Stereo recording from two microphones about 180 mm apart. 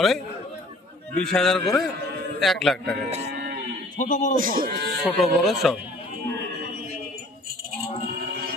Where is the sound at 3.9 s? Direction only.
45° left (ahead or behind).